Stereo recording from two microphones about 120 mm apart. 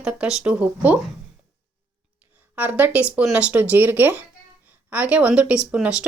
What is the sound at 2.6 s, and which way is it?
Speech, 15° right (ahead or behind).